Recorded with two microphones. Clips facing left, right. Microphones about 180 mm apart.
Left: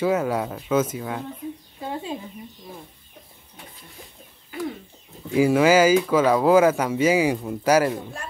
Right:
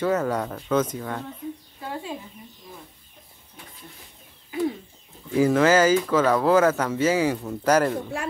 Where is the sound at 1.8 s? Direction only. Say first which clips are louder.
Left 3 dB; 25° left (ahead or behind).